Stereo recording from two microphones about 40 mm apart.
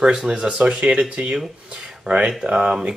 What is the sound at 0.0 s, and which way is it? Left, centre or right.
Speech, right.